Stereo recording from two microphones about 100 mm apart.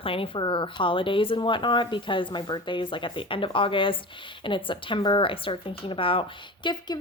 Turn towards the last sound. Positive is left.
turn(degrees=50)  # may be behind; listen again after turning